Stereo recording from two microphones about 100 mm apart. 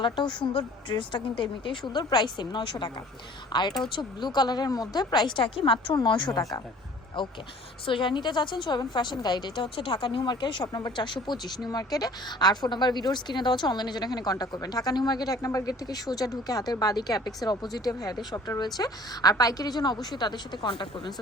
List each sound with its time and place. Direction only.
0.0 s a woman's voice: 50° left (ahead or behind)
1.9 s a woman's voice: 45° left (ahead or behind)
9.7 s a woman's voice: 60° left (ahead or behind)